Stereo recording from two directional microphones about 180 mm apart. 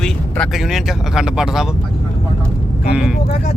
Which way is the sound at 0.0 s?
Centre (ahead or behind).